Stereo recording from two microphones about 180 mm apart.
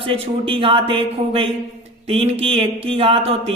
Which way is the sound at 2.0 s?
35° right (ahead or behind).